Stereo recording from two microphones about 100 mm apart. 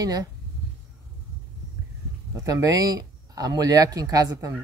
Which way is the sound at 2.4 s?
35° right (ahead or behind).